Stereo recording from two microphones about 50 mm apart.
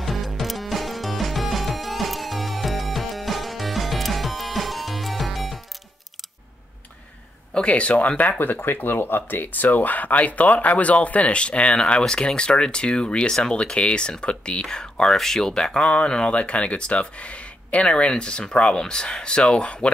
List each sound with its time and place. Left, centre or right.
0.0 s music: centre
7.5 s speech: left